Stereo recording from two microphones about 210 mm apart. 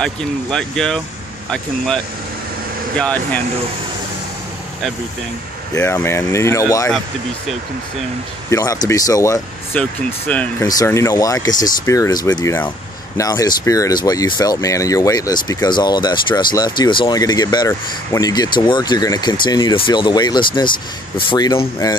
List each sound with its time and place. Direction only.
0.0 s speech: 5° left (ahead or behind)
3.0 s speech: 5° left (ahead or behind)
5.8 s speech: 10° left (ahead or behind)
8.5 s speech: 15° left (ahead or behind)